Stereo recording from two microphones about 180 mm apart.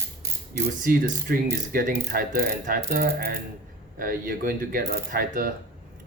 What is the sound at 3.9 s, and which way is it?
Speech, 50° right (ahead or behind).